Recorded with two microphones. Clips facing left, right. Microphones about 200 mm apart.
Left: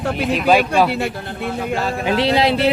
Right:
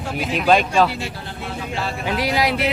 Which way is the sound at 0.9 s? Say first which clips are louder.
Left 7 dB; 60° left (ahead or behind).